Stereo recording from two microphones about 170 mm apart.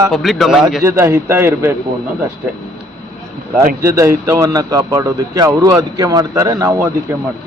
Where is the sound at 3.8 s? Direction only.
15° right (ahead or behind).